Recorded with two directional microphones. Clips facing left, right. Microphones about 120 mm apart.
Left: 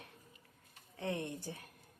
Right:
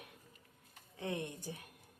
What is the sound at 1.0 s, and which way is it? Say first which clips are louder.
Speech: left 1 dB; 20° right (ahead or behind).